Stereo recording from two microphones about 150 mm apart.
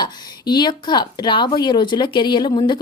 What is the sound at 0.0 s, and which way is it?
A woman's voice, 30° left (ahead or behind).